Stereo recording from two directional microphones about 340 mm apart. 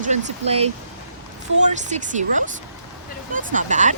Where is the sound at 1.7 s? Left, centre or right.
Right.